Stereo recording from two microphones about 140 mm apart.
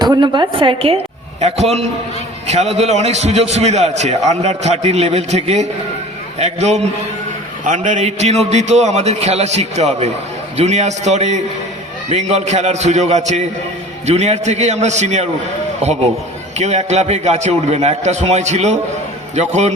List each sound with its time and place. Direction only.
0.0 s a woman's voice: 30° right (ahead or behind)
2.5 s a man's voice: 50° right (ahead or behind)
16.6 s a man's voice: 55° right (ahead or behind)